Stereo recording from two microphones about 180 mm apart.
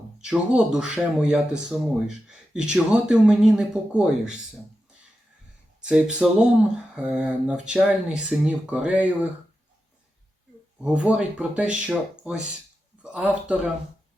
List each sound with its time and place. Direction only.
0.2 s speech: 5° right (ahead or behind)
5.8 s speech: 5° right (ahead or behind)
10.8 s speech: 5° right (ahead or behind)